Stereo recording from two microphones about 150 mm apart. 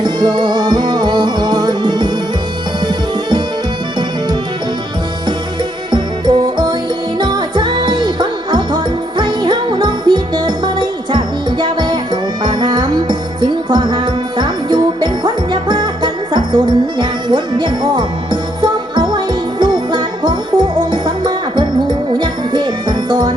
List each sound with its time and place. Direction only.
0.0 s music: 30° right (ahead or behind)
5.9 s music: 30° right (ahead or behind)